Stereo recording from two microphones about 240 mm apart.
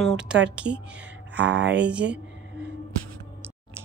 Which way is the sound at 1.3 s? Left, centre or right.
Right.